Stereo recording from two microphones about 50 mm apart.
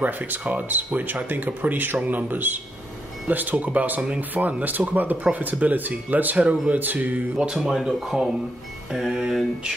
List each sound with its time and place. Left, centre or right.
0.0 s speech: right
7.3 s music: centre
8.9 s music: centre